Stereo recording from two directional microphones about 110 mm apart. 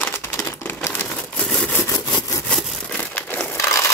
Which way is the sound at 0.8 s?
15° left (ahead or behind).